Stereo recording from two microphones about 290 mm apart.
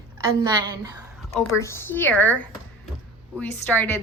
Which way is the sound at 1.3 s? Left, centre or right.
Centre.